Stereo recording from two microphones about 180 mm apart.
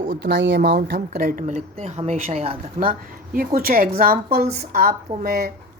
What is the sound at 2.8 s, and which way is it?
A woman's voice, 50° right (ahead or behind).